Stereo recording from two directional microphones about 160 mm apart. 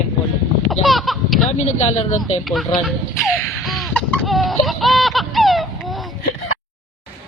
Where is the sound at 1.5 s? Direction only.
45° left (ahead or behind).